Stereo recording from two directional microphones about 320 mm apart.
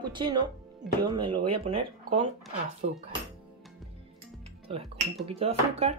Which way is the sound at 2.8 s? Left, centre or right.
Right.